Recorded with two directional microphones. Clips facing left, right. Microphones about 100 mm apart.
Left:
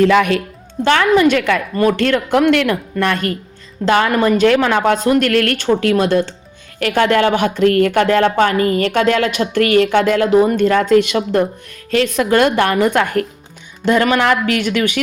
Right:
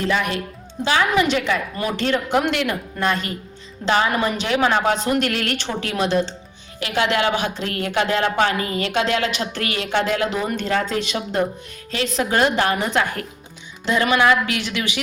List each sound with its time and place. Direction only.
0.0 s speech: 90° left
1.1 s speech: 45° left (ahead or behind)
1.9 s a woman's voice: 65° left (ahead or behind)